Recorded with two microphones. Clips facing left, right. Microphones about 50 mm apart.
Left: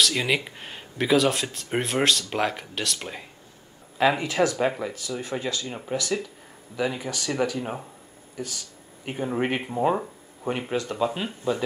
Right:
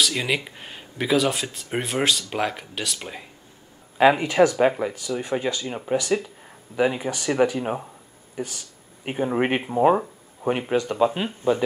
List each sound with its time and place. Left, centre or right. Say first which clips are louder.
0.0 s speech: even; centre
4.0 s speech: right 5 dB; centre